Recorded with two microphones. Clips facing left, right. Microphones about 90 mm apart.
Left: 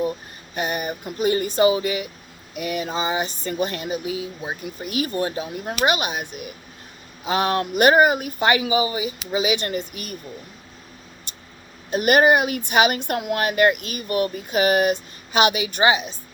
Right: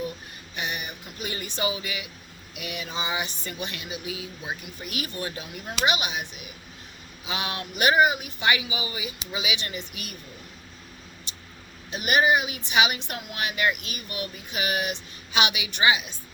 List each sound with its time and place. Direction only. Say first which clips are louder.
0.5 s speech: left 8 dB; 45° left (ahead or behind)
2.6 s a sound: left 8 dB; 45° left (ahead or behind)
5.6 s speech: left 4 dB; 45° left (ahead or behind)
11.9 s speech: left 6 dB; 50° left (ahead or behind)